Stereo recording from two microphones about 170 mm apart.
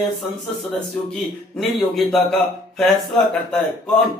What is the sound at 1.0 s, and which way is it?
A man's voice, centre (ahead or behind).